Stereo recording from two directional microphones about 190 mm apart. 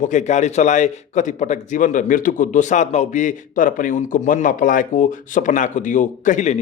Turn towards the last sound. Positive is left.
turn(degrees=40)  # may be behind; listen again after turning